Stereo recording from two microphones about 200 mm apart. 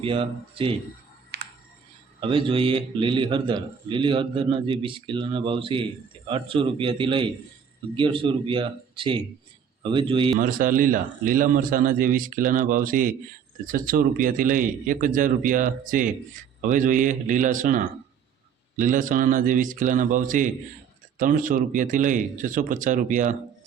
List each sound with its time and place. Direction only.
0.0 s a man's voice: 25° right (ahead or behind)
1.3 s a sound: 60° right (ahead or behind)
2.2 s a man's voice: 25° right (ahead or behind)
10.3 s speech: 45° right (ahead or behind)